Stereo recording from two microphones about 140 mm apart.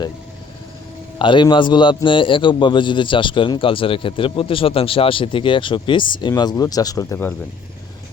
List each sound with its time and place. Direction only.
1.2 s a man's voice: 35° left (ahead or behind); by 7.3 s 15° left (ahead or behind)